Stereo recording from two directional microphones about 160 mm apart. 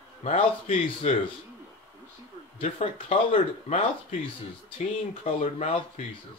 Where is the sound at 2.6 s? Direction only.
40° left (ahead or behind).